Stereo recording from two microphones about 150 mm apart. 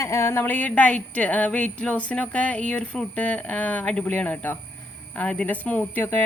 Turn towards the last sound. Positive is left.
turn(degrees=15)  # may be behind; listen again after turning